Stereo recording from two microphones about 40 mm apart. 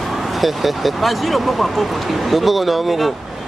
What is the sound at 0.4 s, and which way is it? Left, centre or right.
Speech, centre.